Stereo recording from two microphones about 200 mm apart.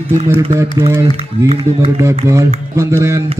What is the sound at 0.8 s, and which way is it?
Speech, 15° right (ahead or behind).